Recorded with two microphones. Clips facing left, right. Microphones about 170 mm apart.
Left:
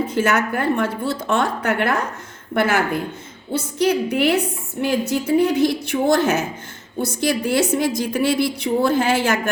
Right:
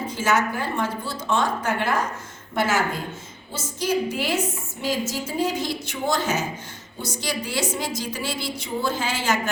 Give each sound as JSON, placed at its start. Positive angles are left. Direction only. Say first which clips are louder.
{"t": 0.1, "sound": "a woman's voice", "louder": "left 4 dB", "side_deg": 60}